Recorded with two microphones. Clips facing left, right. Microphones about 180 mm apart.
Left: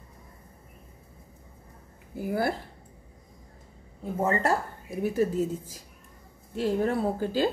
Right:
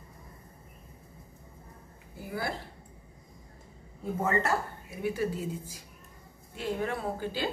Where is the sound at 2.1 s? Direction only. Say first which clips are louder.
Left 8 dB; 50° left (ahead or behind).